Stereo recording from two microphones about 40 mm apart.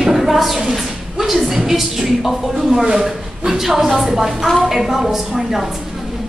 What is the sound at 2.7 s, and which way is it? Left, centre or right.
A woman's voice, centre.